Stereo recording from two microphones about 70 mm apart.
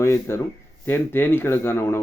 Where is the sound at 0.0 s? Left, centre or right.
Left.